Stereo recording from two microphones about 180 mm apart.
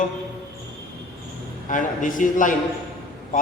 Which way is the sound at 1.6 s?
45° left (ahead or behind).